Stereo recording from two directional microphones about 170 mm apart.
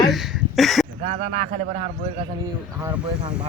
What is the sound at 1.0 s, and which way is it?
A man's voice, 45° right (ahead or behind).